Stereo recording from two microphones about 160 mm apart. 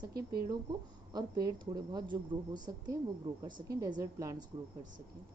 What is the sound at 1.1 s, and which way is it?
A woman's voice, 25° right (ahead or behind).